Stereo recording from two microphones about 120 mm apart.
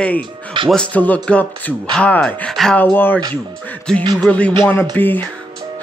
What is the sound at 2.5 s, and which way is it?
Music, 5° left (ahead or behind).